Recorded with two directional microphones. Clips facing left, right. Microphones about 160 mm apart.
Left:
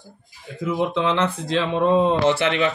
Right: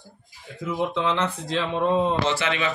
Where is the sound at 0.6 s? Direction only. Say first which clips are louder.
Left 3 dB; 85° left; by 2.7 s 60° left (ahead or behind).